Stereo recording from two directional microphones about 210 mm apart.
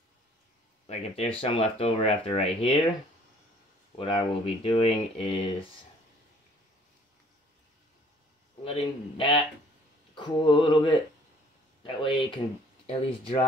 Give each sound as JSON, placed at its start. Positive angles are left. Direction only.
{"t": 0.8, "sound": "speech", "side_deg": 30}
{"t": 4.0, "sound": "speech", "side_deg": 25}
{"t": 8.6, "sound": "speech", "side_deg": 25}